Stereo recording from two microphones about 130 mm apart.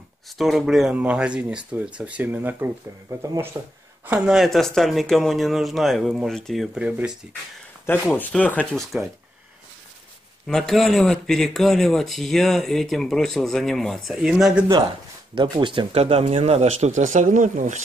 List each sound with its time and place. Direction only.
0.4 s speech: centre (ahead or behind)
4.4 s speech: 5° left (ahead or behind)
7.8 s speech: 15° left (ahead or behind)
10.4 s speech: 5° left (ahead or behind)
15.3 s speech: 35° right (ahead or behind); by 17.8 s 75° right (ahead or behind)